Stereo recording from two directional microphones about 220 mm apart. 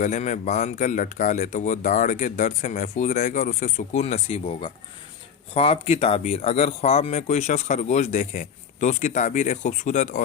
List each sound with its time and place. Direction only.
0.0 s speech: 30° left (ahead or behind)